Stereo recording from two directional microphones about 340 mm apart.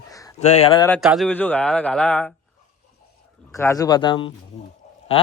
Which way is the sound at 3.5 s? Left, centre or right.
Centre.